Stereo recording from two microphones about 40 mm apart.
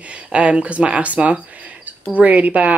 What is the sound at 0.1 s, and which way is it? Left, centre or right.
Speech, right.